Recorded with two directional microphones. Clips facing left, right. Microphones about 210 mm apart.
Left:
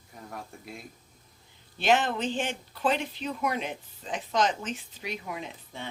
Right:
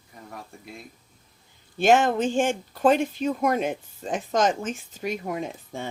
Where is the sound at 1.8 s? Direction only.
45° right (ahead or behind).